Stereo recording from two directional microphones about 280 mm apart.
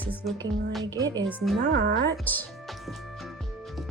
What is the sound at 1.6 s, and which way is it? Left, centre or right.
Speech, right.